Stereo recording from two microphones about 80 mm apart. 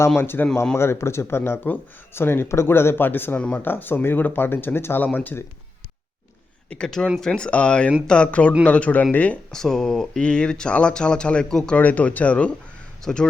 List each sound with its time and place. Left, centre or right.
0.2 s speech: left
6.7 s speech: centre
9.6 s speech: centre
11.8 s speech: centre